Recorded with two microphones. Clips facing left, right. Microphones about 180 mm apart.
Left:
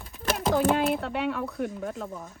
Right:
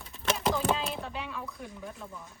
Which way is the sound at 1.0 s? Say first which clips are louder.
Left 9 dB; 65° left (ahead or behind).